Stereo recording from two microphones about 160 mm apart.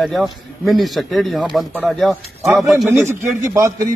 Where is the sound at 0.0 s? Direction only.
Centre (ahead or behind).